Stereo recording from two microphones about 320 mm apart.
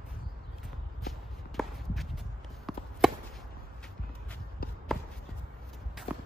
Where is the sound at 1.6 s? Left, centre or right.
Centre.